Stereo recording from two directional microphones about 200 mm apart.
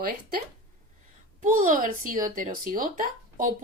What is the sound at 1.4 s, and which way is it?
Speech, 40° right (ahead or behind).